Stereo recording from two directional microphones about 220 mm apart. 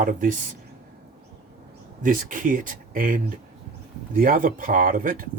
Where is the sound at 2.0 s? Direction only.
40° right (ahead or behind).